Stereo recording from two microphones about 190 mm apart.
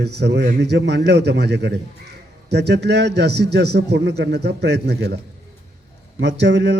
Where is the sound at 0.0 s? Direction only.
60° right (ahead or behind).